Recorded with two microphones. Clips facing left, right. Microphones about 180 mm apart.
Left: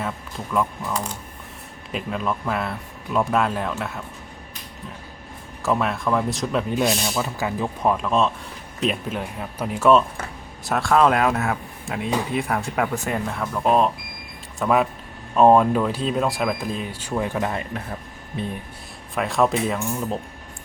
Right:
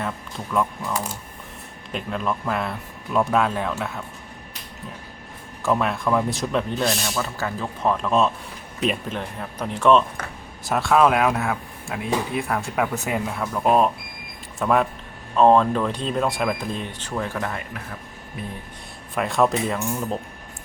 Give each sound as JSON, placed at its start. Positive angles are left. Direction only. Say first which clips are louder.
{"t": 0.0, "sound": "speech", "louder": "even", "side_deg": 0}
{"t": 5.6, "sound": "speech", "louder": "even", "side_deg": 0}
{"t": 19.1, "sound": "speech", "louder": "even", "side_deg": 0}